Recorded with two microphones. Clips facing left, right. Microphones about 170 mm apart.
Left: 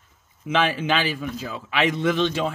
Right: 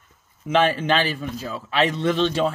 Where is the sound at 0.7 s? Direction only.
10° left (ahead or behind).